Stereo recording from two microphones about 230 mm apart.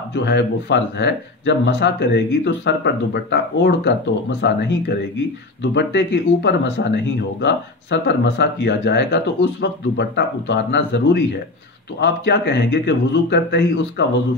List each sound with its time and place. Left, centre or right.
0.1 s speech: left